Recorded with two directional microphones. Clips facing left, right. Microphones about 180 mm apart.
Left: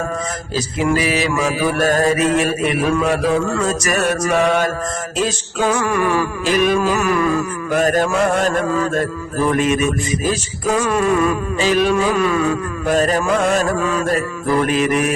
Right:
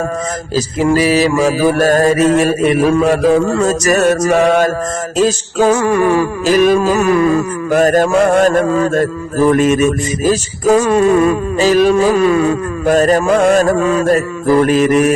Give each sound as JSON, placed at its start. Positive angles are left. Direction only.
{"t": 0.5, "sound": "mantra", "side_deg": -40}